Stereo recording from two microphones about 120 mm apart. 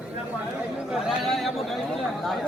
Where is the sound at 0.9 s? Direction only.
Centre (ahead or behind).